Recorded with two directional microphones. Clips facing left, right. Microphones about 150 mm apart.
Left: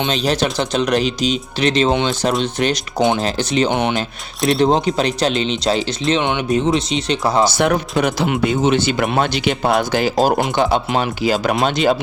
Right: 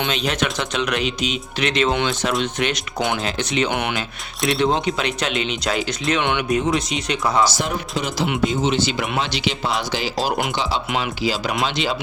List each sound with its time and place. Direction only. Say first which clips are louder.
0.1 s speech: left 4 dB; 35° left (ahead or behind)
3.7 s speech: left 5 dB; 25° left (ahead or behind)
4.4 s speech: left 5 dB; centre (ahead or behind)
4.6 s speech: left 5 dB; 35° left (ahead or behind)
7.4 s speech: left 6 dB; 60° left (ahead or behind)